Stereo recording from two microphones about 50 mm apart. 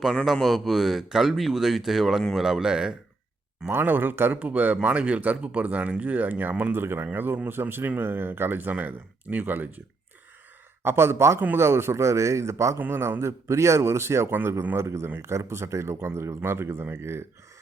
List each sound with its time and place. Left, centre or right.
0.4 s speech: centre
3.7 s speech: right
4.4 s speech: right
4.8 s speech: right
6.7 s speech: right
8.7 s speech: right
10.8 s a man's voice: right
12.9 s a man's voice: right
14.3 s speech: right
14.8 s a man's voice: right